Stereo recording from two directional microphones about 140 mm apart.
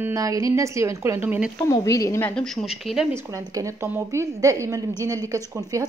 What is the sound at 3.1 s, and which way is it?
A woman's voice, 20° right (ahead or behind).